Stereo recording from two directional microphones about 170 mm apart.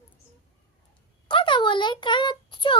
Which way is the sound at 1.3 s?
30° left (ahead or behind).